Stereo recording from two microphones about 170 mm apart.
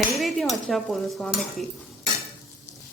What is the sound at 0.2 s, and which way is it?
Cutlery, centre (ahead or behind).